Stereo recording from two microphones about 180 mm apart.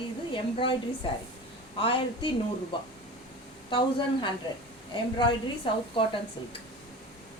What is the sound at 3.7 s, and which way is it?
Speech, 25° left (ahead or behind).